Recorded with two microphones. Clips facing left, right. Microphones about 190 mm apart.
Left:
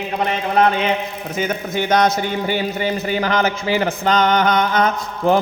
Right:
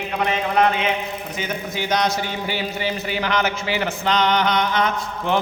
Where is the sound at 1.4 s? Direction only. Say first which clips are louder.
Left 7 dB; 50° left (ahead or behind).